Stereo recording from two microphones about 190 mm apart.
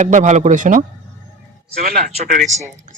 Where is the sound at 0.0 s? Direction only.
40° right (ahead or behind).